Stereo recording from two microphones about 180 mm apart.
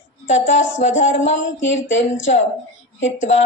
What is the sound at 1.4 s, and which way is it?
Speech, 90° left.